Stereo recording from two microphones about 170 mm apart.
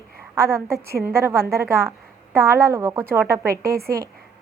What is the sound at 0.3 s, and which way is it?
A woman's voice, 15° right (ahead or behind).